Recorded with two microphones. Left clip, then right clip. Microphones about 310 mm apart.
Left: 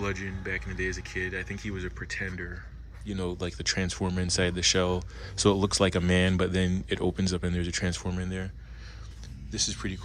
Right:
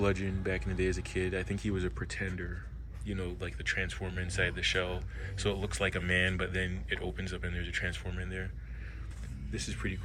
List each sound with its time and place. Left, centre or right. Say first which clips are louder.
0.0 s speech: right 1 dB; centre
3.2 s speech: left 8 dB; centre
9.5 s speech: left 7 dB; centre